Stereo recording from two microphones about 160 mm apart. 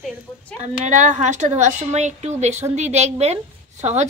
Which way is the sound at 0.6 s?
50° right (ahead or behind).